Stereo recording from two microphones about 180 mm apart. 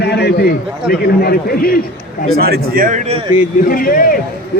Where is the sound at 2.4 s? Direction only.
50° right (ahead or behind).